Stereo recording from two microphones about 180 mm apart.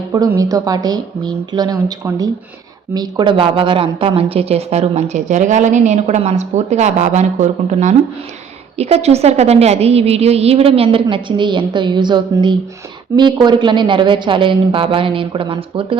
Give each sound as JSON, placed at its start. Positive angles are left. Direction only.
{"t": 0.1, "sound": "a woman's voice", "side_deg": -20}